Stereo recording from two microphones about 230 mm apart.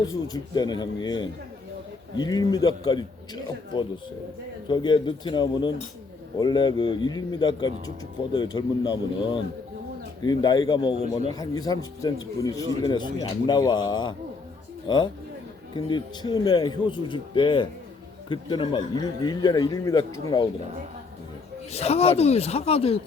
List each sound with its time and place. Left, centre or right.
0.1 s a man's voice: centre
21.7 s a man's voice: left